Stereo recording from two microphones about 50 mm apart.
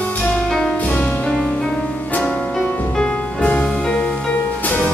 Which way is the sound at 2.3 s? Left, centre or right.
Left.